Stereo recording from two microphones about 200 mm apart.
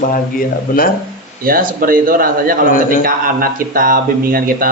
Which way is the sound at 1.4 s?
45° right (ahead or behind).